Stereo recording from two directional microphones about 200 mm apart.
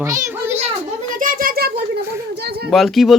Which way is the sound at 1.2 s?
45° right (ahead or behind).